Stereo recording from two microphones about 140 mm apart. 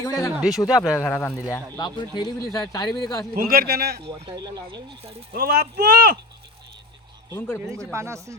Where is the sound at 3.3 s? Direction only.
90° right.